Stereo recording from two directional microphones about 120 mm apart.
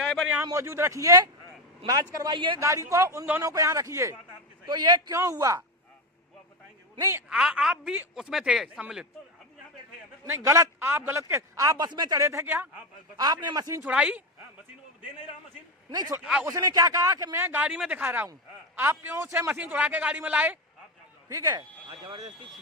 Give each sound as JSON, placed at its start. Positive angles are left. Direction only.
{"t": 0.0, "sound": "a sound", "side_deg": 0}
{"t": 0.5, "sound": "a man's voice", "side_deg": -20}
{"t": 2.6, "sound": "a man's voice", "side_deg": -25}
{"t": 4.6, "sound": "speech", "side_deg": -35}
{"t": 7.0, "sound": "a man's voice", "side_deg": -20}
{"t": 7.3, "sound": "speech", "side_deg": -5}
{"t": 10.2, "sound": "a man's voice", "side_deg": -20}
{"t": 13.1, "sound": "speech", "side_deg": -35}
{"t": 13.8, "sound": "a man's voice", "side_deg": -10}
{"t": 15.9, "sound": "a man's voice", "side_deg": -30}
{"t": 21.2, "sound": "speech", "side_deg": -30}